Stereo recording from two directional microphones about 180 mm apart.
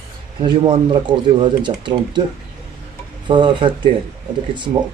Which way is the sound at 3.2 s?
25° right (ahead or behind).